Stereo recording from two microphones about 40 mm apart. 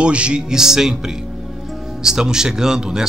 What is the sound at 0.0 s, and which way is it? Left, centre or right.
Speech, right.